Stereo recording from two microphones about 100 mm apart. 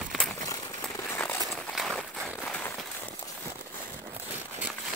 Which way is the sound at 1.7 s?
Centre (ahead or behind).